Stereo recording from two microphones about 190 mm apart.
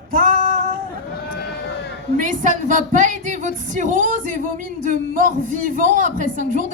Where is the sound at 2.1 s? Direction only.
40° right (ahead or behind).